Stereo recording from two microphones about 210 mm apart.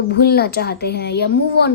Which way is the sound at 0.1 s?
50° left (ahead or behind).